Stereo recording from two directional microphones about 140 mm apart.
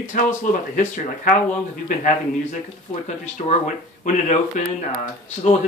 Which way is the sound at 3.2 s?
60° left (ahead or behind).